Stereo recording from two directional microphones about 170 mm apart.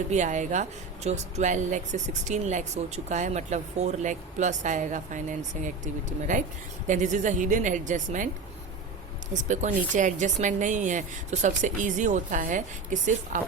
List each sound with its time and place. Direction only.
0.1 s speech: 45° right (ahead or behind)
9.3 s speech: 45° right (ahead or behind)